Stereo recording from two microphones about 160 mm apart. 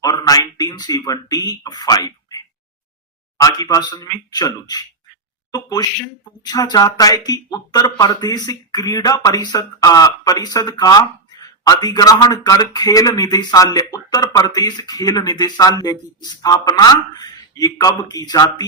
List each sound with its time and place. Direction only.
0.0 s a man's voice: 25° left (ahead or behind)